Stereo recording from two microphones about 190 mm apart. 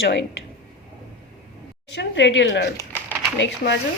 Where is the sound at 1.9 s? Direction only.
70° left (ahead or behind).